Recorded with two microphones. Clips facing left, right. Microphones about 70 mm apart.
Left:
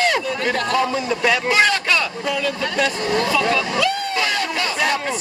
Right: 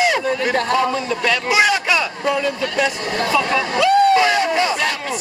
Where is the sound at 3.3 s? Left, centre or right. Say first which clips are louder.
Right 1 dB; centre.